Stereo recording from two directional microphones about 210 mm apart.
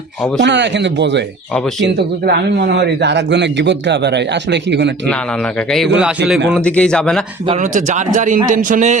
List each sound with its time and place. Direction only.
0.3 s speech: 55° right (ahead or behind)
5.5 s speech: centre (ahead or behind)
7.4 s a man's voice: 35° right (ahead or behind)